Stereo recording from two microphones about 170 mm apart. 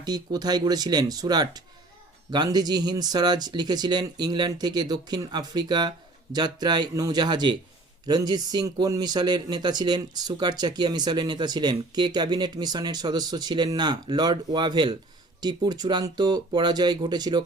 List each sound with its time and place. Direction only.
0.0 s speech: 25° right (ahead or behind)